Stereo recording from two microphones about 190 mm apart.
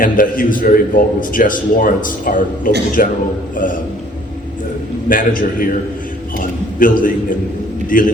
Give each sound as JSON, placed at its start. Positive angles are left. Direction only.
{"t": 0.0, "sound": "a man's voice", "side_deg": 45}
{"t": 5.0, "sound": "a man's voice", "side_deg": 45}